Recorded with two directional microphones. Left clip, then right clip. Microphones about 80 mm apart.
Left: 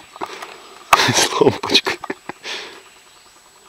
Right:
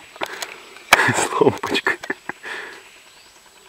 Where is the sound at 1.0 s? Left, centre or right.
Left.